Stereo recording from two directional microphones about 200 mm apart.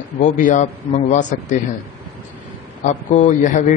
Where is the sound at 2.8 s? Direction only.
40° left (ahead or behind).